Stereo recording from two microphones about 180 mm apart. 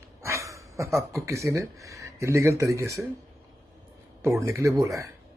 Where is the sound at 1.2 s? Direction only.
15° right (ahead or behind).